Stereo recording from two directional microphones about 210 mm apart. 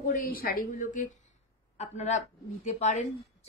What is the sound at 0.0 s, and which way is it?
Speech, 40° left (ahead or behind).